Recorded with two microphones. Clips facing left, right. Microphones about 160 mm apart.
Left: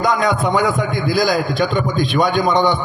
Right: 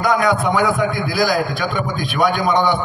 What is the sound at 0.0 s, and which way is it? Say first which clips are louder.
A man's voice: even; 20° left (ahead or behind).